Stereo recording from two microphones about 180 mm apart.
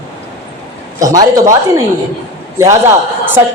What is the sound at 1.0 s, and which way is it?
Speech, 20° right (ahead or behind).